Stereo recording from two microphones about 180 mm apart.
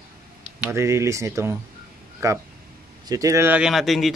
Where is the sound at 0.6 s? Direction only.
15° right (ahead or behind); by 4.1 s centre (ahead or behind).